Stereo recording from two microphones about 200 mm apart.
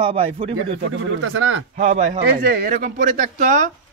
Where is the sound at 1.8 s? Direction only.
40° right (ahead or behind).